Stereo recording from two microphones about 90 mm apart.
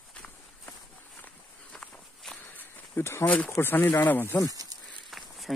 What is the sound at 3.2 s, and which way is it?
Speech, 15° left (ahead or behind).